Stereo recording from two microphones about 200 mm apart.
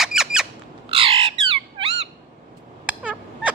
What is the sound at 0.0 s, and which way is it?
Squeak, 5° right (ahead or behind).